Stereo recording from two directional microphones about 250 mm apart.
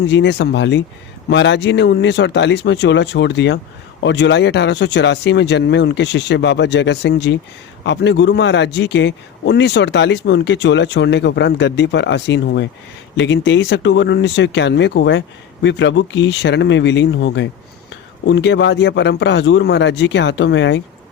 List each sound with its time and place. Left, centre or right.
0.1 s a man's voice: left